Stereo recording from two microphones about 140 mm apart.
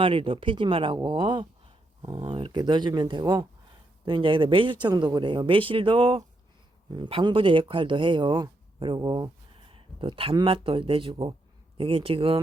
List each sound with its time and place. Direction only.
0.0 s speech: 40° right (ahead or behind)